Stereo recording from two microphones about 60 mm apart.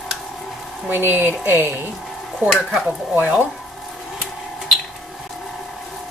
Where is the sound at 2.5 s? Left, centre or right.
Centre.